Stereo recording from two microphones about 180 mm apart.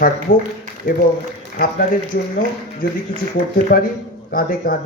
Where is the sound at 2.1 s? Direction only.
50° left (ahead or behind).